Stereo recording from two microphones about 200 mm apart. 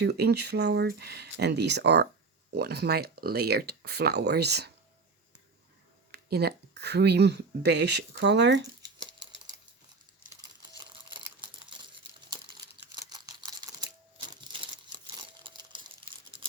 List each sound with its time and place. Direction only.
0.0 s speech: 55° right (ahead or behind)
6.1 s speech: 55° right (ahead or behind)
10.4 s crumpling: 20° right (ahead or behind)
13.6 s a sound: 20° right (ahead or behind)
14.4 s crumpling: 25° right (ahead or behind)
16.0 s a sound: 25° right (ahead or behind)